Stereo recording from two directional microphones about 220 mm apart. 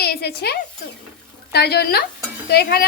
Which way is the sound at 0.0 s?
45° left (ahead or behind).